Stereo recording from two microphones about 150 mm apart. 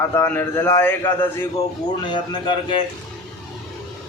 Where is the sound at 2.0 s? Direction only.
30° left (ahead or behind).